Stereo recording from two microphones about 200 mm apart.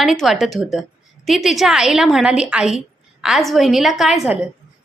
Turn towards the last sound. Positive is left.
turn(degrees=-5)  # may be behind; listen again after turning